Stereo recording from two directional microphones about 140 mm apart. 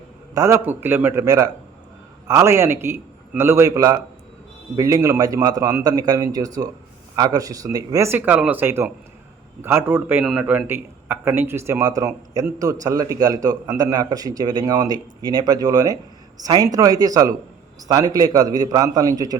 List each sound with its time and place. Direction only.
0.3 s a man's voice: 20° right (ahead or behind)